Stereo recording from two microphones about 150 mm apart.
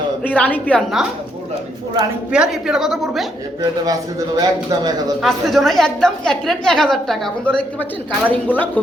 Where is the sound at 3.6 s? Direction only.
25° right (ahead or behind).